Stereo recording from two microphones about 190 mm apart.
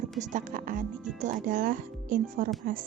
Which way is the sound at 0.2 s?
40° right (ahead or behind).